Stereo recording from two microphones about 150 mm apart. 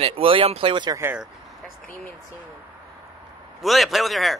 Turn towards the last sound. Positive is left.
turn(degrees=0)  # may be behind; listen again after turning